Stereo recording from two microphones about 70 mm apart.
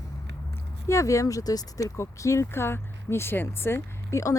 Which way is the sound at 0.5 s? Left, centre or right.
Left.